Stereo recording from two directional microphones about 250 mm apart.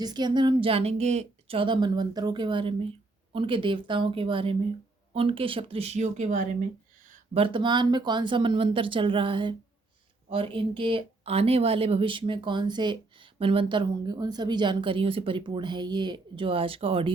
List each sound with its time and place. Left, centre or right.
0.0 s speech: centre